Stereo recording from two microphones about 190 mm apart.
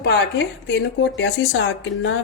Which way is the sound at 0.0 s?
60° left (ahead or behind).